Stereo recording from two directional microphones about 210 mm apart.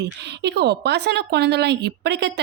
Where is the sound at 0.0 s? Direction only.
55° right (ahead or behind).